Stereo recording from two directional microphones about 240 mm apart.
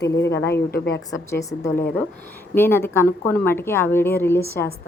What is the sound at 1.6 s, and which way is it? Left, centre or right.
Speech, left.